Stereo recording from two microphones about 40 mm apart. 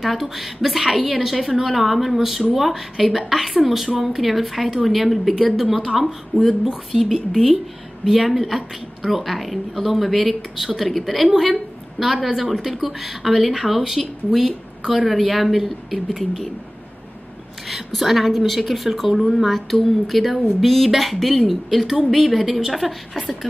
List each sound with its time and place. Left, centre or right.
0.0 s a woman's voice: centre
17.6 s a woman's voice: centre